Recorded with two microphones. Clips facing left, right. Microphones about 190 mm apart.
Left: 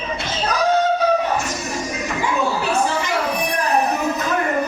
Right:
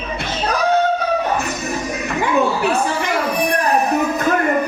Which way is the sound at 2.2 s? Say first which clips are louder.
Right 5 dB; 60° right (ahead or behind).